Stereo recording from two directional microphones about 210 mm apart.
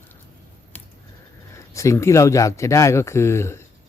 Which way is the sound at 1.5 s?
15° left (ahead or behind).